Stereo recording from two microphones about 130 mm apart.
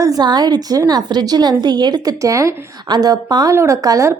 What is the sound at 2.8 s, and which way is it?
A woman's voice, 30° right (ahead or behind).